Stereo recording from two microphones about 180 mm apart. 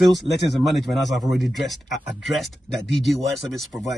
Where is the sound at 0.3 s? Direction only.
70° left (ahead or behind).